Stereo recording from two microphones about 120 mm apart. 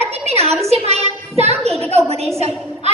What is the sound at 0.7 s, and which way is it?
Child singing, 60° right (ahead or behind).